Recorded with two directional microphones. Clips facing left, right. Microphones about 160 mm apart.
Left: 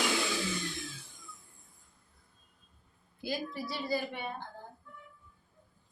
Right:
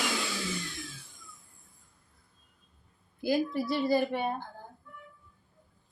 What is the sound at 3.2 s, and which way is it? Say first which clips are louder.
A woman's voice: right 8 dB; 50° right (ahead or behind).